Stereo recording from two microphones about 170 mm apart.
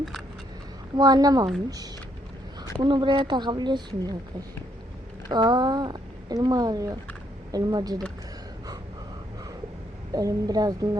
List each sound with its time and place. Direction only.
0.9 s speech: 20° right (ahead or behind)
2.8 s speech: 25° right (ahead or behind)
5.3 s speech: 25° right (ahead or behind)
10.1 s speech: 20° right (ahead or behind)